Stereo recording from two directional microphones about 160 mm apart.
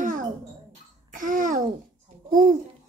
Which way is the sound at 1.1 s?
55° right (ahead or behind).